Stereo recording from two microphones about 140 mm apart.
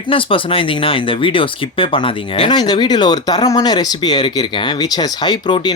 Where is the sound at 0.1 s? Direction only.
40° left (ahead or behind).